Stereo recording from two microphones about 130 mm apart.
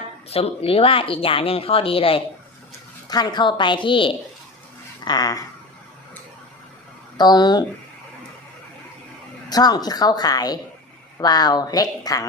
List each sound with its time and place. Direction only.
0.3 s speech: 50° left (ahead or behind)
3.1 s speech: 35° left (ahead or behind)
7.2 s speech: 30° left (ahead or behind)
9.5 s speech: 30° left (ahead or behind)